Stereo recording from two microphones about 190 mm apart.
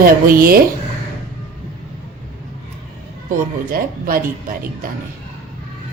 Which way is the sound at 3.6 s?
50° right (ahead or behind).